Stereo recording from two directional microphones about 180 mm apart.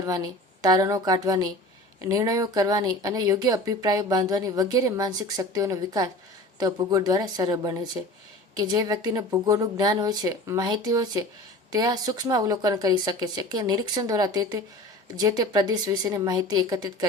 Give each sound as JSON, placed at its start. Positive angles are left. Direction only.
{"t": 0.0, "sound": "speech", "side_deg": -20}